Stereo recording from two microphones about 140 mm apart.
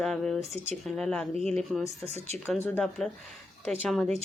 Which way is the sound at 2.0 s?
50° right (ahead or behind).